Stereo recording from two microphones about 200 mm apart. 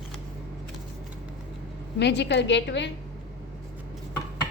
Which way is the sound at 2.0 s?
60° left (ahead or behind).